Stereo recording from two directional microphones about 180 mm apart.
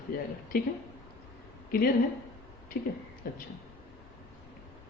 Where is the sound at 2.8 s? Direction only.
60° left (ahead or behind).